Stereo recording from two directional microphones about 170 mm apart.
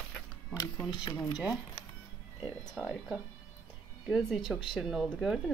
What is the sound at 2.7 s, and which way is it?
Speech, 5° right (ahead or behind).